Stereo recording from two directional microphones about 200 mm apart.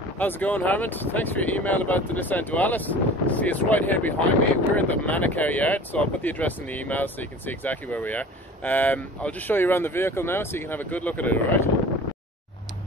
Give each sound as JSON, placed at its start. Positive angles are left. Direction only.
{"t": 0.2, "sound": "speech", "side_deg": 10}